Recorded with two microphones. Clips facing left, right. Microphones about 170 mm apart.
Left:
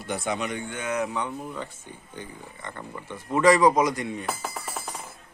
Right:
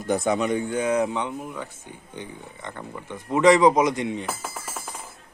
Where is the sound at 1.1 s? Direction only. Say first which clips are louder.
Right 2 dB; 20° right (ahead or behind).